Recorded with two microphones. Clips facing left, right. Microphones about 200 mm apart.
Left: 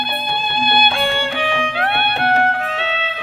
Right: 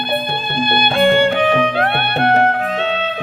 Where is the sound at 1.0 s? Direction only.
45° right (ahead or behind).